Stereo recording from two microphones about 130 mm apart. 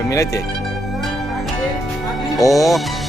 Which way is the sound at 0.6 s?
Centre (ahead or behind).